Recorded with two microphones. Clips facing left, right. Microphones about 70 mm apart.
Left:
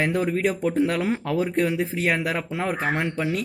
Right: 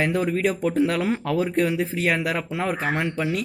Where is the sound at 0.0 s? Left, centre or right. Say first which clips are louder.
Even; left.